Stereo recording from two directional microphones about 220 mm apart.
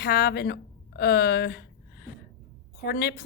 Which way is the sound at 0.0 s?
45° left (ahead or behind).